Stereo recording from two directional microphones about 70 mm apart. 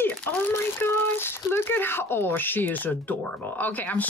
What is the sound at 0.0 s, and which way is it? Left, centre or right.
Speech, left.